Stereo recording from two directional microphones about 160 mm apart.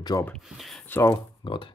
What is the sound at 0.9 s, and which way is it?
Speech, 15° left (ahead or behind).